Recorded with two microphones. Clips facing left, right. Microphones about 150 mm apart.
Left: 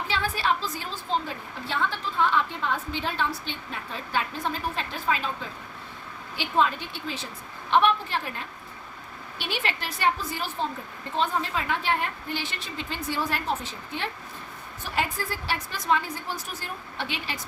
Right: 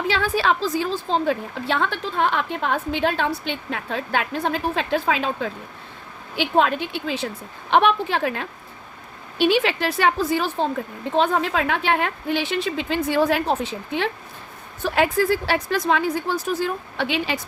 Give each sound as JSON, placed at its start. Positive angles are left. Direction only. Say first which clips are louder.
{"t": 0.1, "sound": "a woman's voice", "louder": "right 5 dB", "side_deg": -90}
{"t": 1.3, "sound": "a woman's voice", "louder": "right 10 dB", "side_deg": -70}
{"t": 6.3, "sound": "a woman's voice", "louder": "right 5 dB", "side_deg": -70}
{"t": 14.8, "sound": "a woman's voice", "louder": "right 11 dB", "side_deg": -90}